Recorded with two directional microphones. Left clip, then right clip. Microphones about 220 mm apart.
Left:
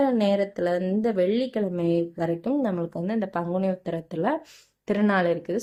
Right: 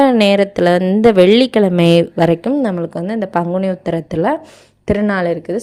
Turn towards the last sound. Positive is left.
turn(degrees=-25)  # may be behind; listen again after turning